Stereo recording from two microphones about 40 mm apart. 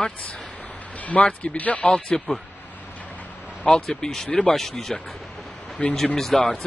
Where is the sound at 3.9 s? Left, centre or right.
Centre.